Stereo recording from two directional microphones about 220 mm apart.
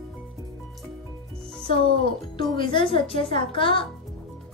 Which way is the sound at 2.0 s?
20° left (ahead or behind).